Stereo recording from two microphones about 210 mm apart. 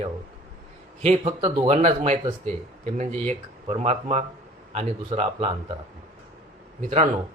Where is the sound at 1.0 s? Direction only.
30° right (ahead or behind).